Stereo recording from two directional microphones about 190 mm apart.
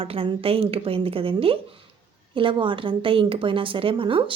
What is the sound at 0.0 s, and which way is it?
Speech, 30° right (ahead or behind).